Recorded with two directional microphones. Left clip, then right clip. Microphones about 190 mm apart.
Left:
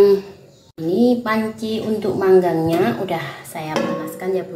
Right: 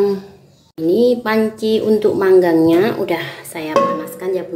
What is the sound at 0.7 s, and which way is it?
A woman's voice, 40° right (ahead or behind).